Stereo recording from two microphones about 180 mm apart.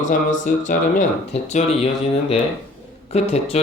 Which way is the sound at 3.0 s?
35° left (ahead or behind).